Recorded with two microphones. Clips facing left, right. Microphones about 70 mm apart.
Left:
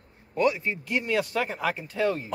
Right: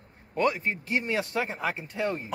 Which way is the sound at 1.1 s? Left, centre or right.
Centre.